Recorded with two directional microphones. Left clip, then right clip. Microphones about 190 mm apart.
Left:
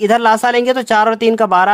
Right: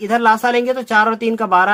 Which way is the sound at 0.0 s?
40° left (ahead or behind).